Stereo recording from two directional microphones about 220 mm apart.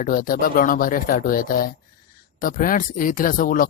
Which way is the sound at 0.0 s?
40° left (ahead or behind).